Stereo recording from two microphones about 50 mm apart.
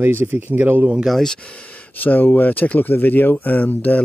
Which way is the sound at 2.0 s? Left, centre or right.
Left.